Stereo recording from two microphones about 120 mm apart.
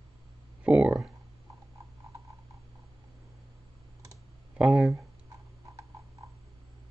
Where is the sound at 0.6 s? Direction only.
10° right (ahead or behind).